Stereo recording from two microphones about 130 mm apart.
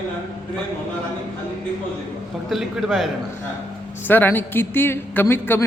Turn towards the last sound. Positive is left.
turn(degrees=15)  # may be behind; listen again after turning